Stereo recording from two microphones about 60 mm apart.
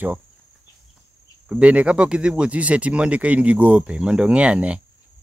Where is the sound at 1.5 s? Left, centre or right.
Right.